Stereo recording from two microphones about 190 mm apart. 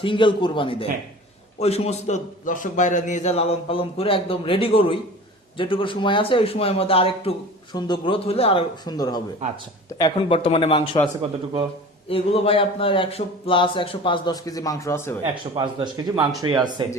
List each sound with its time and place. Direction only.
0.0 s a man's voice: 25° left (ahead or behind)
11.2 s a man's voice: 35° right (ahead or behind)
12.0 s a man's voice: 30° left (ahead or behind); by 15.1 s 15° left (ahead or behind)
15.5 s speech: 25° right (ahead or behind)